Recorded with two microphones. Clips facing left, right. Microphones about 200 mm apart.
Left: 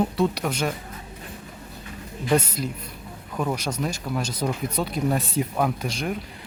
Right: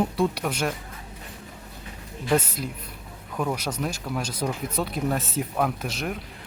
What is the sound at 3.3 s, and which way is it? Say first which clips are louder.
Speech: left 1 dB; 5° right (ahead or behind).